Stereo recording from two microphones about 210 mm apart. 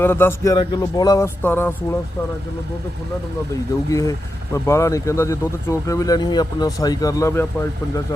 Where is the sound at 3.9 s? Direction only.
15° left (ahead or behind).